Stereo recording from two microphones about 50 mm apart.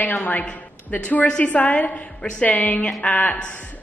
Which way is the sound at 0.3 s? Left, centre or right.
Left.